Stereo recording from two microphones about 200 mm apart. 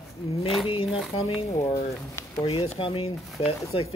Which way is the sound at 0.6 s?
30° left (ahead or behind).